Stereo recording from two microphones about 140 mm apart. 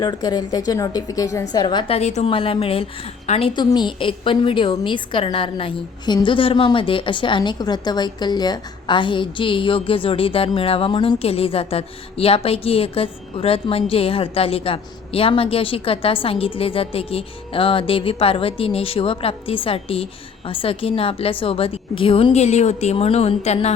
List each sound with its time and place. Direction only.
0.0 s a woman's voice: 30° left (ahead or behind)
1.6 s a woman's voice: 35° left (ahead or behind)
2.0 s a woman's voice: 55° left (ahead or behind)